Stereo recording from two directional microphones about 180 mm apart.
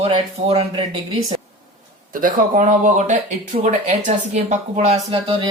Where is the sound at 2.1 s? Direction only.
45° right (ahead or behind).